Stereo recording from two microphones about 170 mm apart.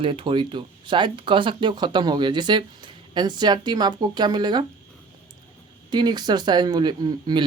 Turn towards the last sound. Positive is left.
turn(degrees=-25)  # may be behind; listen again after turning